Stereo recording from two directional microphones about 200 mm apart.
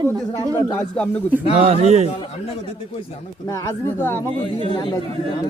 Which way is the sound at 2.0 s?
30° left (ahead or behind).